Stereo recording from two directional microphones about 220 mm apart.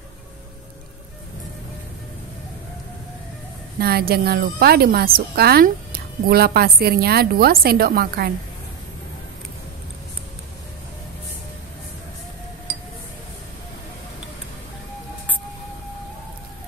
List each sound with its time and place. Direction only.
3.8 s a woman's voice: 45° right (ahead or behind)